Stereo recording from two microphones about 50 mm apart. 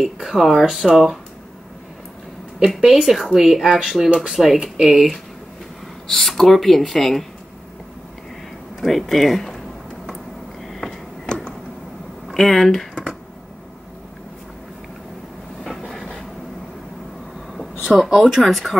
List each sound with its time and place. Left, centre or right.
0.0 s speech: centre
2.8 s speech: centre
6.0 s speech: centre
8.8 s speech: centre
10.7 s a sound: centre
11.2 s a sound: centre
12.4 s speech: centre
18.0 s speech: centre